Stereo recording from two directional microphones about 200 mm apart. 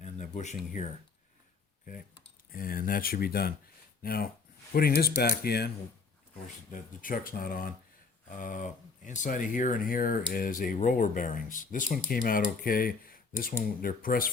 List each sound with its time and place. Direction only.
0.0 s speech: 35° left (ahead or behind)
2.5 s speech: 45° left (ahead or behind)
6.7 s speech: 40° left (ahead or behind)